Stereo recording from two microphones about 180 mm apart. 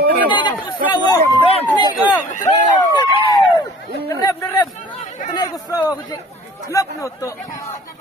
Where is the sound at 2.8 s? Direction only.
25° left (ahead or behind).